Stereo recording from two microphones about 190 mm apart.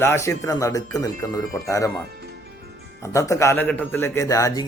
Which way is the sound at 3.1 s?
15° left (ahead or behind).